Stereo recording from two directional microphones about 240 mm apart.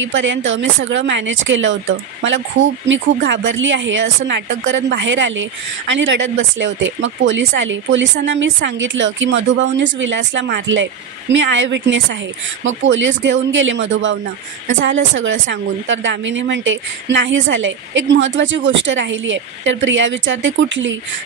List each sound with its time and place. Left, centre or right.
0.0 s speech: right